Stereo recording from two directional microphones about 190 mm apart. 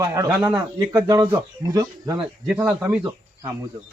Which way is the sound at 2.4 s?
5° right (ahead or behind).